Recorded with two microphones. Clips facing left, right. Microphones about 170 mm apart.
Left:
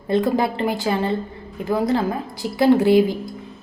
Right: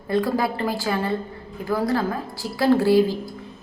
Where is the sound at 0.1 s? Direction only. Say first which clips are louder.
Left 3 dB; 20° left (ahead or behind).